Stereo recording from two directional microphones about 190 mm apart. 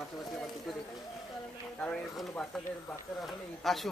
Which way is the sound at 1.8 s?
5° left (ahead or behind).